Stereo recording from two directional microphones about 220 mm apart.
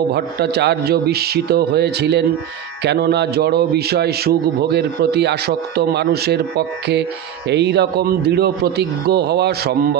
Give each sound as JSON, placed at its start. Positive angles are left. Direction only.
{"t": 0.1, "sound": "a man's voice", "side_deg": -50}